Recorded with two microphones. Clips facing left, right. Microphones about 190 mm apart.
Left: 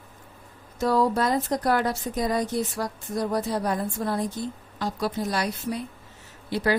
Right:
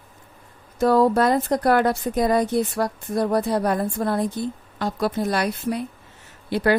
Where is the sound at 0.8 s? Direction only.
55° right (ahead or behind).